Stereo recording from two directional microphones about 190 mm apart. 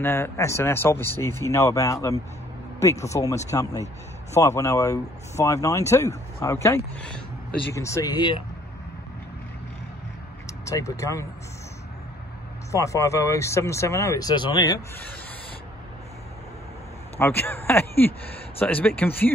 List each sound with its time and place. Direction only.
0.0 s speech: 10° left (ahead or behind)
10.6 s speech: 15° left (ahead or behind)
12.7 s speech: 15° left (ahead or behind)
17.2 s speech: 10° left (ahead or behind)